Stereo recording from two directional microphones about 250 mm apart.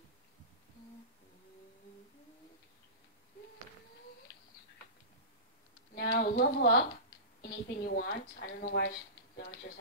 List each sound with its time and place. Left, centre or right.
5.9 s a woman's voice: left